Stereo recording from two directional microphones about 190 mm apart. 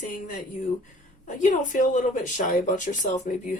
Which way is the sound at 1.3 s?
40° left (ahead or behind).